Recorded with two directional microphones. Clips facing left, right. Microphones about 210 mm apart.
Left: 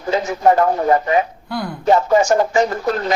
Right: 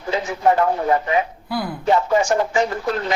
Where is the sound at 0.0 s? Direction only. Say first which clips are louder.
Left 3 dB; 40° left (ahead or behind).